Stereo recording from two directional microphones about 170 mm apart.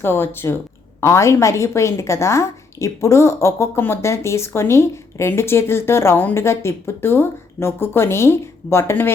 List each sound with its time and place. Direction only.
0.0 s a woman's voice: 15° left (ahead or behind)